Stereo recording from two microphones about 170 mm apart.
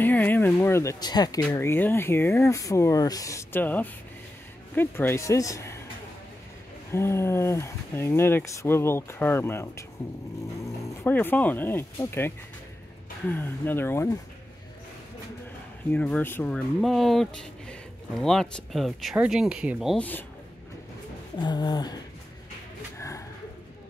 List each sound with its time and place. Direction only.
0.0 s speech: 10° left (ahead or behind)
6.9 s speech: 15° left (ahead or behind)
15.9 s speech: 10° left (ahead or behind)
20.0 s speech: 10° left (ahead or behind)
21.4 s a sound: 25° left (ahead or behind)